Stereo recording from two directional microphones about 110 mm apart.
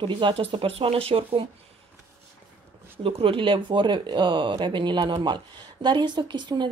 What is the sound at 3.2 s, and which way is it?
Speech, 50° right (ahead or behind).